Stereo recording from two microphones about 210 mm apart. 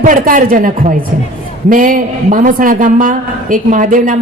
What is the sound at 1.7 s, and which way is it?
A man's voice, 40° right (ahead or behind).